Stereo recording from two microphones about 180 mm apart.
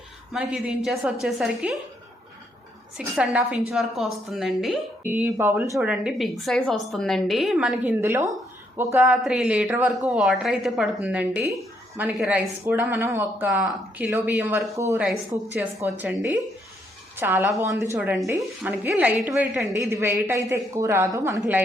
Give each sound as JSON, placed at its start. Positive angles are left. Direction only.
{"t": 0.3, "sound": "a woman's voice", "side_deg": -5}
{"t": 3.2, "sound": "a woman's voice", "side_deg": -5}
{"t": 16.0, "sound": "speech", "side_deg": -10}